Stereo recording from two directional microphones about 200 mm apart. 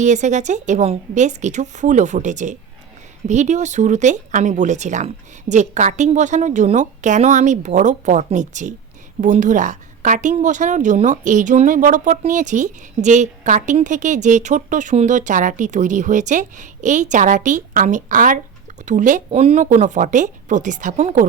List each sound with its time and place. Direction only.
0.0 s a woman's voice: 35° right (ahead or behind)